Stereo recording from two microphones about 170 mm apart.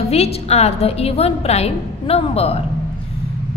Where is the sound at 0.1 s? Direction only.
35° left (ahead or behind).